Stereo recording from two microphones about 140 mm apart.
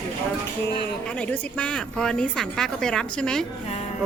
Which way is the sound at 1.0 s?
10° left (ahead or behind).